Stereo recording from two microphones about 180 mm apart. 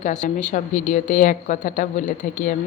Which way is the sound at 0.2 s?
45° left (ahead or behind).